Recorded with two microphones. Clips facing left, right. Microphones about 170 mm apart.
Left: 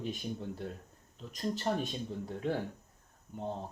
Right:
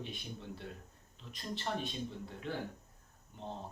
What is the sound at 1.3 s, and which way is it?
Speech, 40° left (ahead or behind).